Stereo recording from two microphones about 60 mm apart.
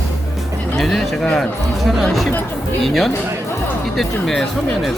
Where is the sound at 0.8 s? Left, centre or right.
Centre.